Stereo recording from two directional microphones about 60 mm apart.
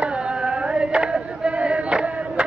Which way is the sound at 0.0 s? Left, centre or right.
Centre.